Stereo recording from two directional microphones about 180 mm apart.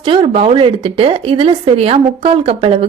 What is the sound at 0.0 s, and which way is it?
A woman's voice, 30° right (ahead or behind).